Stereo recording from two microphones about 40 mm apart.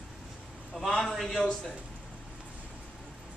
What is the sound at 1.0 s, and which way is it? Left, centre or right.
Speech, centre.